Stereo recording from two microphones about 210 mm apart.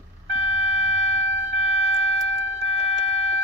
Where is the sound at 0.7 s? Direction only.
30° left (ahead or behind).